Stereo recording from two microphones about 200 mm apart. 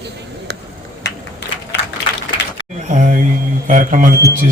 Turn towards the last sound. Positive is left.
turn(degrees=-45)  # may be behind; listen again after turning